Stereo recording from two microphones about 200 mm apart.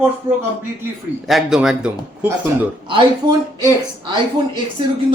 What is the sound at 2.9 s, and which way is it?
Speech, 20° right (ahead or behind).